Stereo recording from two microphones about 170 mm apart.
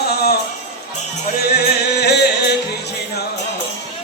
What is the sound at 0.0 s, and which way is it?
Music, 70° left (ahead or behind).